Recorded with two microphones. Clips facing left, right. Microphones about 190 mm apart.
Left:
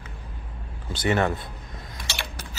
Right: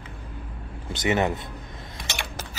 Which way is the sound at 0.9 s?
20° right (ahead or behind).